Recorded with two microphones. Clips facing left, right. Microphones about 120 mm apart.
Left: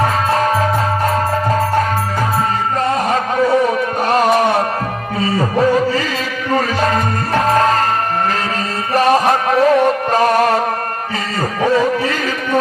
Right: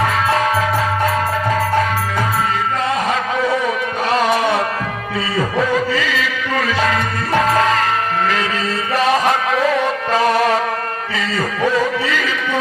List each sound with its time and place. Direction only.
4.1 s music: 45° left (ahead or behind)
5.5 s music: 40° left (ahead or behind)
8.9 s music: 45° left (ahead or behind)
12.0 s carnatic music: 40° left (ahead or behind)